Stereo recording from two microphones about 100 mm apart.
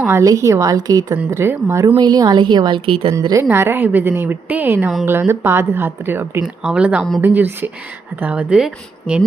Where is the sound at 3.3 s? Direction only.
25° right (ahead or behind).